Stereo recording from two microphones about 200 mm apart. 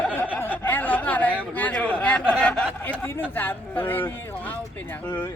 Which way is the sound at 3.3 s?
10° left (ahead or behind).